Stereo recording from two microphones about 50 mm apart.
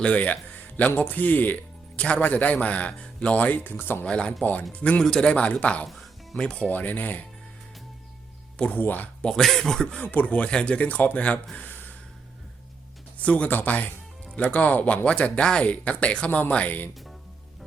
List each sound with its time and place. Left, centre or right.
0.0 s a man's voice: left
2.0 s a man's voice: left
4.0 s speech: left
6.7 s a man's voice: left
8.7 s a man's voice: left
9.2 s speech: centre
10.0 s a man's voice: left
10.3 s speech: left
11.7 s a sound: left
13.1 s a man's voice: left
15.0 s speech: left
16.6 s a man's voice: left